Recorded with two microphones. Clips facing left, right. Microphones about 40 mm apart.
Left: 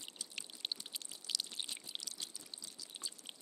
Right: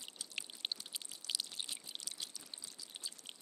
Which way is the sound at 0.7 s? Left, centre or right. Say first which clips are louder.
Even; centre.